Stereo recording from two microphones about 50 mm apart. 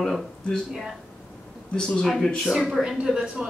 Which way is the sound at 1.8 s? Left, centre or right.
Centre.